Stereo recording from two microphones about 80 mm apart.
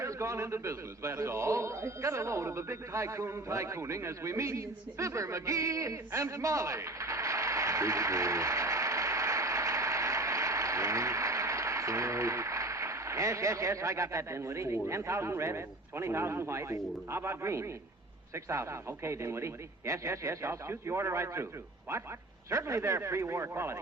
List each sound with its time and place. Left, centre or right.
0.0 s a man's voice: right
22.4 s a man's voice: right